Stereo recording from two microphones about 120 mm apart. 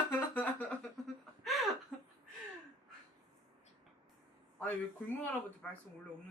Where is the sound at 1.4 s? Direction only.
Centre (ahead or behind).